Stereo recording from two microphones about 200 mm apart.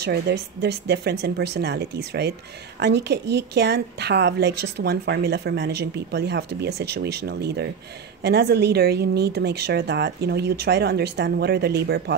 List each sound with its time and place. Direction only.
0.0 s a woman's voice: 55° right (ahead or behind)